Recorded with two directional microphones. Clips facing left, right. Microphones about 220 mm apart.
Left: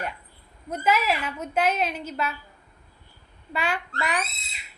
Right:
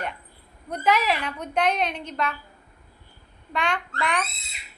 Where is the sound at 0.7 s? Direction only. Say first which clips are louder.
Right 1 dB; 5° left (ahead or behind).